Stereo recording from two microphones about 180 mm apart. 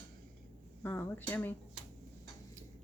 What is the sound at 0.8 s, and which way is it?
Speech, 10° left (ahead or behind).